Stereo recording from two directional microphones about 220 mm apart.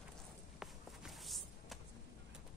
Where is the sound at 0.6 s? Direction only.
Centre (ahead or behind).